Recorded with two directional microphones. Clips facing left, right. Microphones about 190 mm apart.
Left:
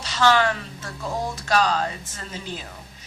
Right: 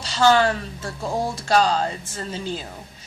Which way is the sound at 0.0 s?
35° right (ahead or behind).